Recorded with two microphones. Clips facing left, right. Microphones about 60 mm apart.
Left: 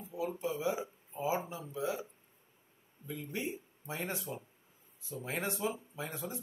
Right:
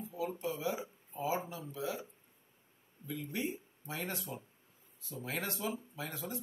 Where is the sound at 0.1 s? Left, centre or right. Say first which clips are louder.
Left 3 dB; centre.